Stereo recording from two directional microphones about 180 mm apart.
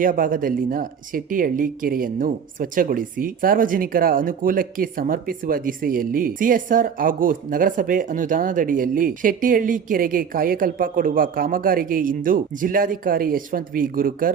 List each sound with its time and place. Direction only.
0.0 s speech: 50° right (ahead or behind)